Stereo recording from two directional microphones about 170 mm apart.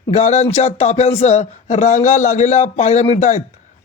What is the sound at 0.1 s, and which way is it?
Speech, 40° left (ahead or behind).